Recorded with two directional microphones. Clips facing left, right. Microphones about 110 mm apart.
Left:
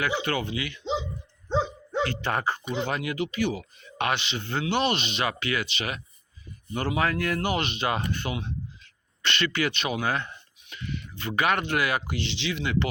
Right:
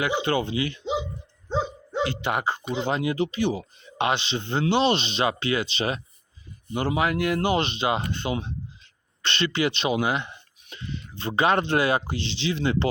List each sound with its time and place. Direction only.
0.0 s speech: 20° right (ahead or behind)
1.5 s dog: 5° right (ahead or behind)
2.0 s speech: 20° right (ahead or behind)
6.7 s speech: 20° right (ahead or behind)
10.7 s speech: 30° right (ahead or behind)